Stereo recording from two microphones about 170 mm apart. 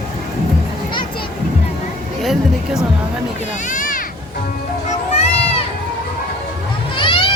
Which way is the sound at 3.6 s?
50° left (ahead or behind).